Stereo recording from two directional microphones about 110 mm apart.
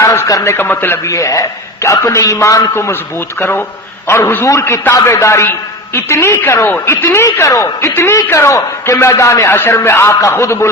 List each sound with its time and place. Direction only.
0.0 s a sound: 25° left (ahead or behind)
0.5 s a man's voice: 20° left (ahead or behind)
4.1 s a man's voice: 20° left (ahead or behind)